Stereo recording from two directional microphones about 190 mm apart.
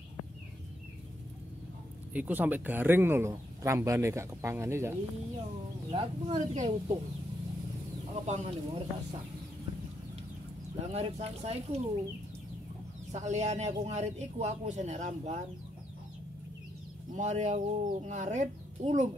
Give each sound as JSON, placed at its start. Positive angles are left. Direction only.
{"t": 2.1, "sound": "speech", "side_deg": -10}
{"t": 5.9, "sound": "a man's voice", "side_deg": -30}
{"t": 8.1, "sound": "a man's voice", "side_deg": -35}
{"t": 10.8, "sound": "a man's voice", "side_deg": -35}
{"t": 13.1, "sound": "a man's voice", "side_deg": -35}
{"t": 17.1, "sound": "a man's voice", "side_deg": -35}